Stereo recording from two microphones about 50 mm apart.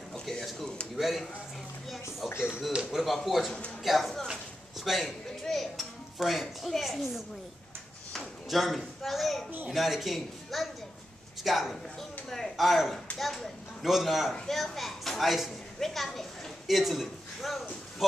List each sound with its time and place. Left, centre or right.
0.1 s a sound: centre
0.9 s a woman's voice: centre
2.2 s speech: left
2.7 s speech: centre
3.2 s a woman's voice: centre
5.4 s music: centre
6.1 s a woman's voice: centre
8.1 s a sound: centre
9.7 s a woman's voice: centre